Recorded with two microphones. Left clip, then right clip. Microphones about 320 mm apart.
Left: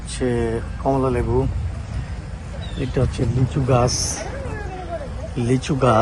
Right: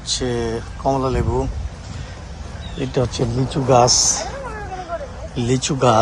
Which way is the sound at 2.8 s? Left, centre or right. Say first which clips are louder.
Right 3 dB; centre.